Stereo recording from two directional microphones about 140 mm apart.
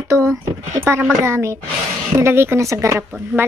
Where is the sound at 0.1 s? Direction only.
20° right (ahead or behind).